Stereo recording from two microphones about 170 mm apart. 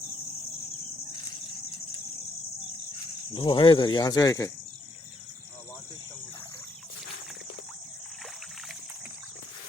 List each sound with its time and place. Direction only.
3.3 s speech: 30° left (ahead or behind)